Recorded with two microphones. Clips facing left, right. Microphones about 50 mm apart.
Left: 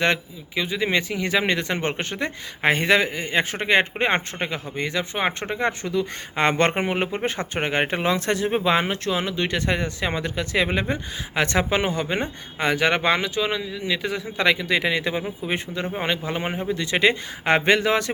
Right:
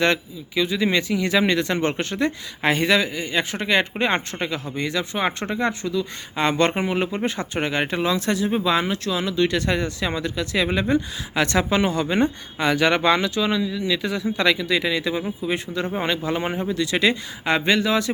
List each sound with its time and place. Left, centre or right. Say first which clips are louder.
0.0 s speech: right 1 dB; left
16.0 s speech: right 2 dB; centre
16.8 s speech: left 1 dB; left
17.4 s speech: left 2 dB; left